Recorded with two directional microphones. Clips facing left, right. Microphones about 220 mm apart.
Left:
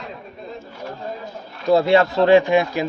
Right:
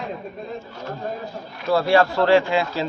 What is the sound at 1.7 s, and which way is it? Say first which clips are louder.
Speech: left 3 dB; 20° left (ahead or behind).